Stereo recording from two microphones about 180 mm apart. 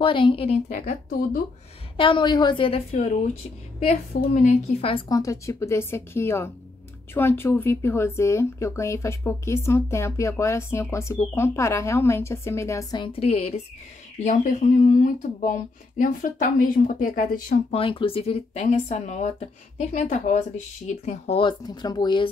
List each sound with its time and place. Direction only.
0.0 s a woman's voice: 30° left (ahead or behind)
0.7 s speech: 45° left (ahead or behind)
2.0 s a woman's voice: 30° left (ahead or behind)
4.3 s speech: 50° left (ahead or behind)
4.8 s speech: 25° left (ahead or behind); by 17.6 s 50° left (ahead or behind)
17.6 s speech: 30° left (ahead or behind)
21.4 s a woman's voice: 25° left (ahead or behind)